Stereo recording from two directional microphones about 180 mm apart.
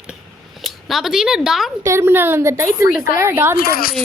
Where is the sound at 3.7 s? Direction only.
55° left (ahead or behind).